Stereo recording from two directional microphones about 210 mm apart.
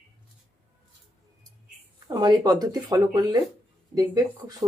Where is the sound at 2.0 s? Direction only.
20° right (ahead or behind).